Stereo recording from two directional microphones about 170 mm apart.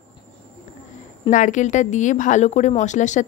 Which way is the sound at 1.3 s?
45° left (ahead or behind).